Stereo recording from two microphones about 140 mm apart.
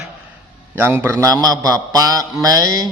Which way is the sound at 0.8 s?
15° right (ahead or behind).